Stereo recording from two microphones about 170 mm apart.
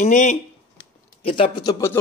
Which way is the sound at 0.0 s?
45° left (ahead or behind).